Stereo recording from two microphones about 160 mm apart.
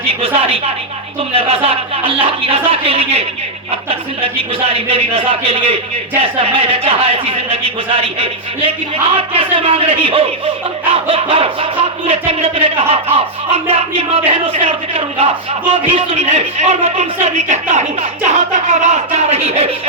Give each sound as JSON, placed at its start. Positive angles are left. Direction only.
{"t": 0.1, "sound": "speech", "side_deg": -40}